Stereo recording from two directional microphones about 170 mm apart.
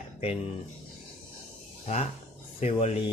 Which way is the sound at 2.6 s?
35° left (ahead or behind).